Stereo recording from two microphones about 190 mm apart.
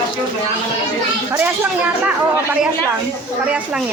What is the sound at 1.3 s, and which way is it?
A woman's voice, 10° right (ahead or behind).